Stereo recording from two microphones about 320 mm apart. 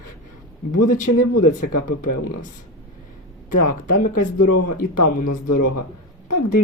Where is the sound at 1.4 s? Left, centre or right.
Left.